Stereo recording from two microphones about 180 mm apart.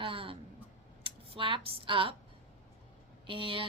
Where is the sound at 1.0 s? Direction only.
30° right (ahead or behind).